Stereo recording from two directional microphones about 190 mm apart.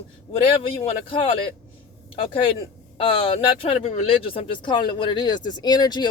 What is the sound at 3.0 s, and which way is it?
Speech, 30° left (ahead or behind).